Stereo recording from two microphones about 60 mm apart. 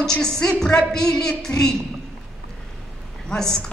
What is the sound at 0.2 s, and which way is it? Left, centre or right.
Speech, centre.